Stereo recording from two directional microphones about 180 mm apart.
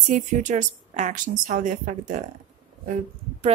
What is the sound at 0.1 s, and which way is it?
A woman's voice, 40° right (ahead or behind).